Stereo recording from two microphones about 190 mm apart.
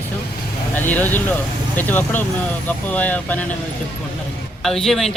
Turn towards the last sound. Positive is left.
turn(degrees=0)  # may be behind; listen again after turning